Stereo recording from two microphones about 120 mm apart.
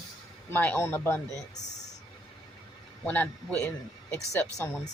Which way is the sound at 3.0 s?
15° left (ahead or behind).